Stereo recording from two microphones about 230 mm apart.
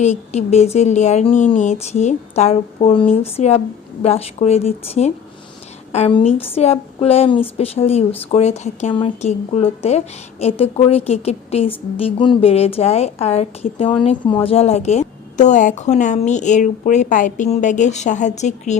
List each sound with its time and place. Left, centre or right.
0.0 s a woman's voice: left